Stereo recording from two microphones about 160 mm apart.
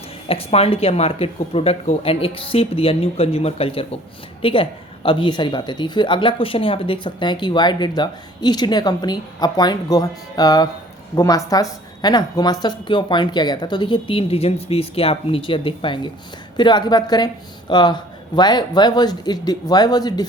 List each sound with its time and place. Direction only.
0.3 s speech: 40° left (ahead or behind)